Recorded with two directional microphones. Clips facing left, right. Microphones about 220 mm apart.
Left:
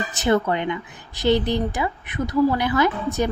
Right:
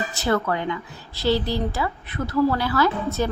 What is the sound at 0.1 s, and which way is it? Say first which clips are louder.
A woman's voice: left 4 dB; 20° left (ahead or behind).